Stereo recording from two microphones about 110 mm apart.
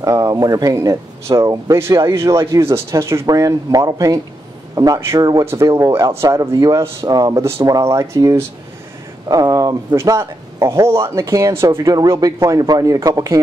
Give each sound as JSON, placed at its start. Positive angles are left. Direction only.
{"t": 0.0, "sound": "speech", "side_deg": -30}